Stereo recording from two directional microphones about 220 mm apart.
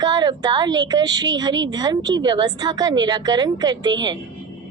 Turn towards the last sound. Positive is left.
turn(degrees=-20)  # may be behind; listen again after turning